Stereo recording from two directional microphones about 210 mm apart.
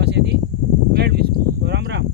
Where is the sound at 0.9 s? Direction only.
50° right (ahead or behind).